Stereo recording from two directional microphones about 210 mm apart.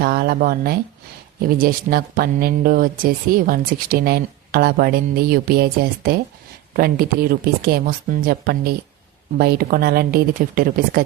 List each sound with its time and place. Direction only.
0.0 s speech: 45° right (ahead or behind)